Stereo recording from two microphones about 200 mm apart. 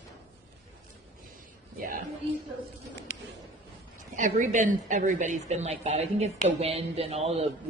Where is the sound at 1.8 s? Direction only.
45° right (ahead or behind).